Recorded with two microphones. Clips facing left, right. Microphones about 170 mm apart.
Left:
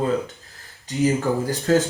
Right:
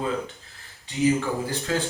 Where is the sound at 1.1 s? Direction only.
45° left (ahead or behind).